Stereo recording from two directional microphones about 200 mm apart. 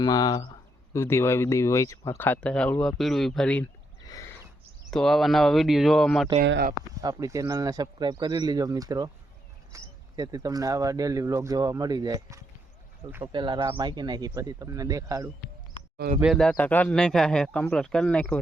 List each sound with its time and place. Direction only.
0.0 s speech: 20° left (ahead or behind)
4.0 s a sound: 20° left (ahead or behind)
4.9 s speech: centre (ahead or behind)
6.4 s speech: 55° right (ahead or behind)
7.0 s speech: 15° right (ahead or behind)
13.3 s speech: 25° right (ahead or behind)
16.2 s speech: centre (ahead or behind)